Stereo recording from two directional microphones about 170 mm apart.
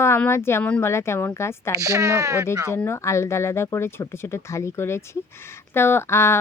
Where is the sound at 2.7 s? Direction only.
15° left (ahead or behind).